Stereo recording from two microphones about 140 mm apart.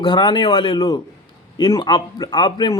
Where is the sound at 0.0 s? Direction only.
35° left (ahead or behind).